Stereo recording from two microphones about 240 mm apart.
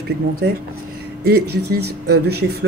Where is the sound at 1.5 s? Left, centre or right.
Right.